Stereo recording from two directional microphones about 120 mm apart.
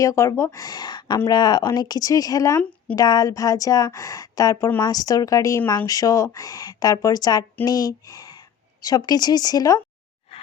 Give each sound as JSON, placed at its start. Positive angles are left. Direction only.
{"t": 0.0, "sound": "a woman's voice", "side_deg": 25}